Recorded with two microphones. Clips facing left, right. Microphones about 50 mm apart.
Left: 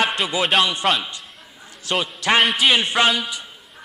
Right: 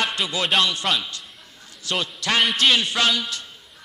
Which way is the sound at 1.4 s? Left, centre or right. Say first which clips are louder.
Left 3 dB; centre.